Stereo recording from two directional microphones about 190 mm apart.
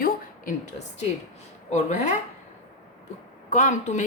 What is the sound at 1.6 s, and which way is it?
Speech, 40° left (ahead or behind).